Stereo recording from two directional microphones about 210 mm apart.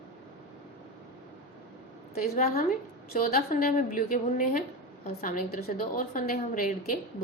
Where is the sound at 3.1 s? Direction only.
40° left (ahead or behind).